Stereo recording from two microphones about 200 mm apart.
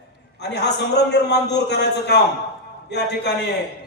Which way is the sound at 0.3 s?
55° left (ahead or behind).